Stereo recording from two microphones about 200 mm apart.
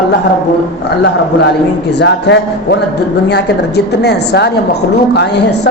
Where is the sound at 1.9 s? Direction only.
60° left (ahead or behind).